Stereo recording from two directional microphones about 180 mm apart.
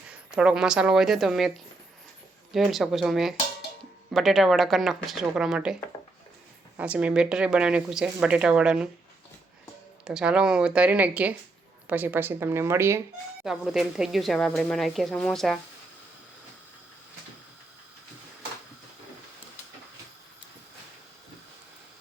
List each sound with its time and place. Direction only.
0.1 s a woman's voice: 5° right (ahead or behind)
6.7 s a woman's voice: 5° right (ahead or behind)
10.0 s a woman's voice: 5° right (ahead or behind)
13.4 s a woman's voice: centre (ahead or behind)